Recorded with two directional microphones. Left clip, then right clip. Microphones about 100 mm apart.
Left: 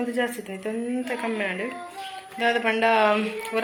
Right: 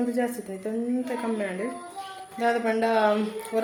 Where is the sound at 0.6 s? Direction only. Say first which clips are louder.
Even; 15° right (ahead or behind).